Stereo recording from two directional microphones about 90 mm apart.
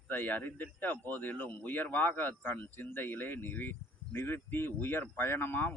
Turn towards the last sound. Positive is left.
turn(degrees=20)  # may be behind; listen again after turning